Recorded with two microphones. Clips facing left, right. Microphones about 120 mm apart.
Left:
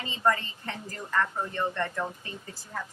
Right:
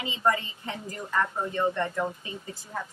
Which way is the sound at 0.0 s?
15° right (ahead or behind).